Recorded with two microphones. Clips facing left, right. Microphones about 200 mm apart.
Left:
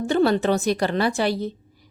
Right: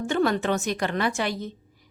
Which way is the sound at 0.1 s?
35° left (ahead or behind).